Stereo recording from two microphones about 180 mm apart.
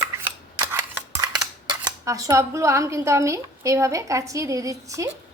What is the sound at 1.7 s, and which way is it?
Speech, 20° right (ahead or behind).